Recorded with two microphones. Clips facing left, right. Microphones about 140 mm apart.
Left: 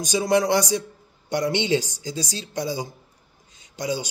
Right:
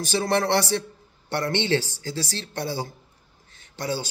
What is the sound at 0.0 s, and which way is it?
Speech, 15° left (ahead or behind).